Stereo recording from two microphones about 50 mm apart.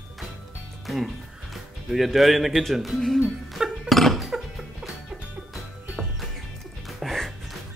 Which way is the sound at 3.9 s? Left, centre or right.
Centre.